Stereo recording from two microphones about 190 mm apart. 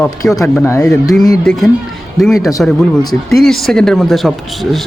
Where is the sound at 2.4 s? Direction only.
15° left (ahead or behind).